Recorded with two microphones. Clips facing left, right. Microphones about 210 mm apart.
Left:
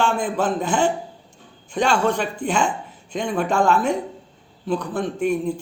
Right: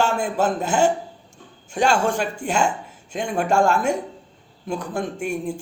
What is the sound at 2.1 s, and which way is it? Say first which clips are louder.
Speech: left 1 dB; 45° right (ahead or behind).